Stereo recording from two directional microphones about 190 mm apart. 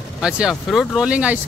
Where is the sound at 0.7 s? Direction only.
5° right (ahead or behind).